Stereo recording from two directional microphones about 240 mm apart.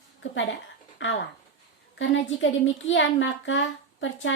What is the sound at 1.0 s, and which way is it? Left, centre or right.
A woman's voice, left.